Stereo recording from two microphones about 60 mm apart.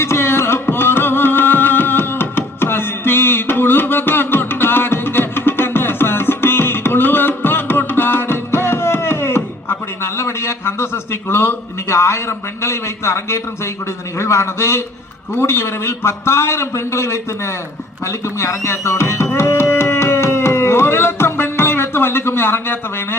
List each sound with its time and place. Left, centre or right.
0.0 s music: left
12.6 s a man's voice: left
18.0 s music: left